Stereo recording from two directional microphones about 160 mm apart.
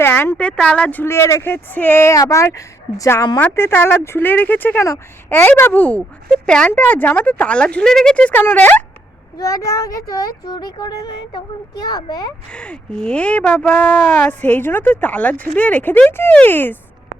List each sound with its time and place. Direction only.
0.0 s speech: 15° left (ahead or behind)
12.5 s speech: 5° left (ahead or behind)